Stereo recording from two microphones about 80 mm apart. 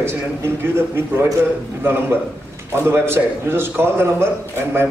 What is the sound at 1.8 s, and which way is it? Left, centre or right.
A man's voice, right.